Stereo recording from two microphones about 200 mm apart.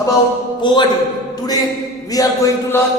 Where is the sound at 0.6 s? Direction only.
20° left (ahead or behind).